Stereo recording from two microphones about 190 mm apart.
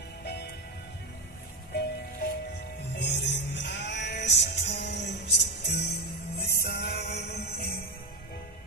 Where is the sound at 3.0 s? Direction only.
65° left (ahead or behind).